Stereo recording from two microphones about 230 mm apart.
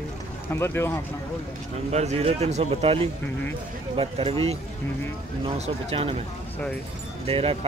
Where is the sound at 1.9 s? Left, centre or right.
Right.